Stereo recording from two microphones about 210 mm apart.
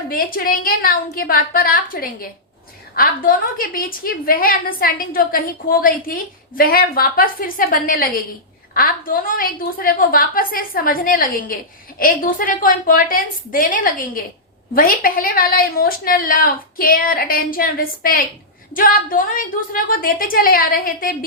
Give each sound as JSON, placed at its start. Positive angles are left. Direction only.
{"t": 0.1, "sound": "a woman's voice", "side_deg": 45}